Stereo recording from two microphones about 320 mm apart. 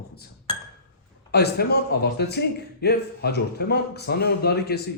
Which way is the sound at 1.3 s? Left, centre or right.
Left.